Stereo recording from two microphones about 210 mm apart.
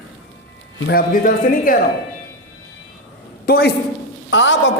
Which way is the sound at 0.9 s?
45° left (ahead or behind).